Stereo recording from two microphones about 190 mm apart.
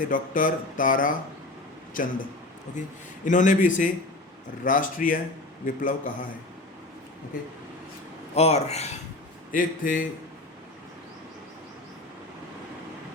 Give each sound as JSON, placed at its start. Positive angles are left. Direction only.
{"t": 0.1, "sound": "a man's voice", "side_deg": 45}
{"t": 8.4, "sound": "speech", "side_deg": 35}
{"t": 9.5, "sound": "speech", "side_deg": 45}